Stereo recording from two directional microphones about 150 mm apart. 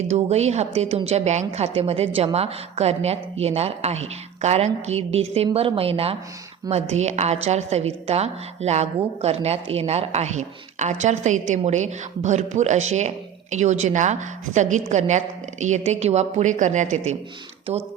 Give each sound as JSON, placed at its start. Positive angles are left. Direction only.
{"t": 0.1, "sound": "a woman's voice", "side_deg": -45}